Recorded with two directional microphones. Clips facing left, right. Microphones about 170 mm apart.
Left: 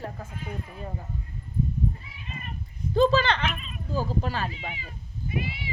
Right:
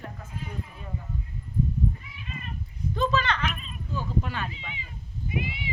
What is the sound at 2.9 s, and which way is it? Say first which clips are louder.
Speech: left 5 dB; 30° left (ahead or behind).